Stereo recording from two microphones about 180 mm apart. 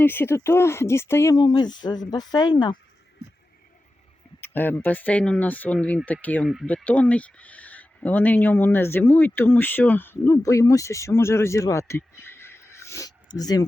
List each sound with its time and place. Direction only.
0.0 s speech: 10° left (ahead or behind)
4.4 s speech: 10° left (ahead or behind)